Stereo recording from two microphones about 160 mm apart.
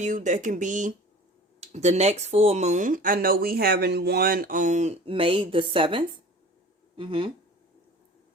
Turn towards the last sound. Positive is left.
turn(degrees=-30)  # may be behind; listen again after turning